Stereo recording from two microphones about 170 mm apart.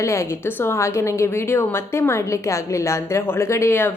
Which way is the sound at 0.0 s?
15° left (ahead or behind).